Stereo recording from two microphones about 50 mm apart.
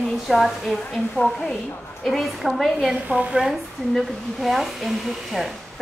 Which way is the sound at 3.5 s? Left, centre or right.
Centre.